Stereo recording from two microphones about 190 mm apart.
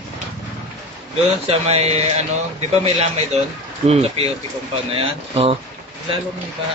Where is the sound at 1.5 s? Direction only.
35° right (ahead or behind).